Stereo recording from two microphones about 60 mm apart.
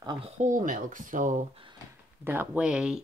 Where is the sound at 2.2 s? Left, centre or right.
Right.